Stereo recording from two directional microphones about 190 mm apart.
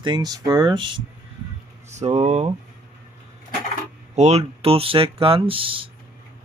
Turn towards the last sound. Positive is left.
turn(degrees=-30)  # may be behind; listen again after turning